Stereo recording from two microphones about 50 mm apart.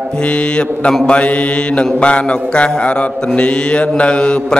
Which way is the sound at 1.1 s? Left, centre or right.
Left.